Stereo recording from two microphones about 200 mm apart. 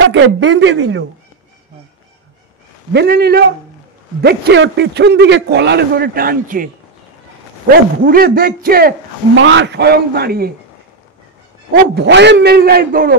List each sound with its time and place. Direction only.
0.0 s speech: 65° right (ahead or behind)
2.9 s a man's voice: 55° right (ahead or behind)
7.7 s a man's voice: 45° right (ahead or behind)
9.4 s a man's voice: 65° right (ahead or behind)
11.7 s a man's voice: 60° right (ahead or behind)